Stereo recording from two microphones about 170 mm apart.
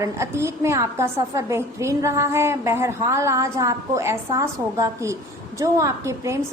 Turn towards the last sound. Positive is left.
turn(degrees=-15)  # may be behind; listen again after turning